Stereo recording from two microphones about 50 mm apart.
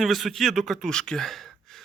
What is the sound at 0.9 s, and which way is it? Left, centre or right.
Speech, centre.